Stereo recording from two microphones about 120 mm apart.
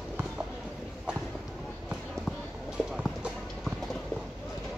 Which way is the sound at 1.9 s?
5° right (ahead or behind).